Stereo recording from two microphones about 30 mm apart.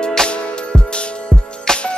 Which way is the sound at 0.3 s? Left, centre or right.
Left.